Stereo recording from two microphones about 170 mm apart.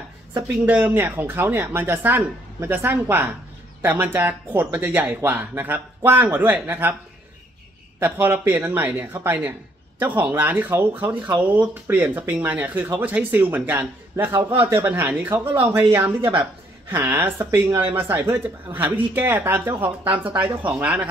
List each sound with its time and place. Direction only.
0.7 s speech: 10° right (ahead or behind)
8.0 s speech: 10° right (ahead or behind)
20.2 s speech: 30° right (ahead or behind)
20.6 s speech: 5° right (ahead or behind)